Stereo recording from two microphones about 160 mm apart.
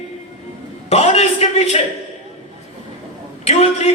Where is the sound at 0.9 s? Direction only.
40° left (ahead or behind).